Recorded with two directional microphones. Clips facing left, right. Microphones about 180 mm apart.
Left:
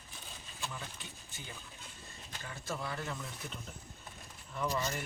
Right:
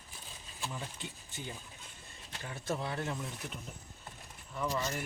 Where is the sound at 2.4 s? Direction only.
25° right (ahead or behind).